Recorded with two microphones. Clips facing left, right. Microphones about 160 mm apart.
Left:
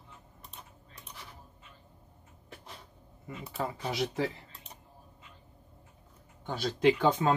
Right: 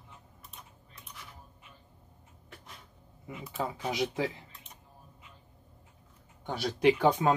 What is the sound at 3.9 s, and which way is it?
Speech, 15° right (ahead or behind).